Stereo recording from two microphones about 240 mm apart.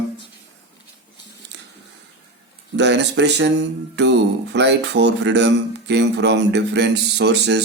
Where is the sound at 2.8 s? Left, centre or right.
Right.